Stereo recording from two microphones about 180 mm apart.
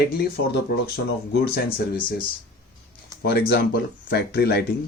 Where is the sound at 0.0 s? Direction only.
60° left (ahead or behind).